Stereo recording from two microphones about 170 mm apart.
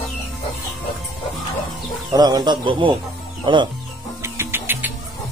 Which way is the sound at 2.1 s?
25° right (ahead or behind).